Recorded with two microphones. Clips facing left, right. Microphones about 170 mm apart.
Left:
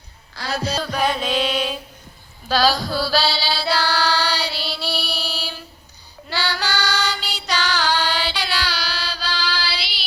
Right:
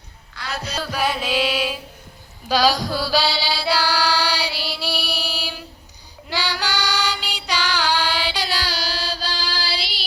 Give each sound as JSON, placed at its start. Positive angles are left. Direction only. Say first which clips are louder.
{"t": 0.3, "sound": "music", "louder": "left 5 dB", "side_deg": 35}
{"t": 0.8, "sound": "music", "louder": "right 1 dB", "side_deg": -5}
{"t": 2.5, "sound": "mantra", "louder": "even", "side_deg": -15}
{"t": 6.2, "sound": "music", "louder": "even", "side_deg": -15}
{"t": 8.4, "sound": "child singing", "louder": "even", "side_deg": -40}